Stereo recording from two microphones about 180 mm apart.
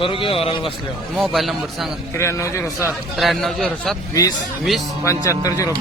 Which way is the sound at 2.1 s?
15° left (ahead or behind).